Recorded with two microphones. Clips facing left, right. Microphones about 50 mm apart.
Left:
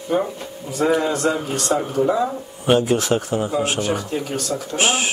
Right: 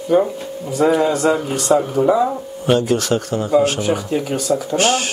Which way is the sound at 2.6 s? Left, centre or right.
Centre.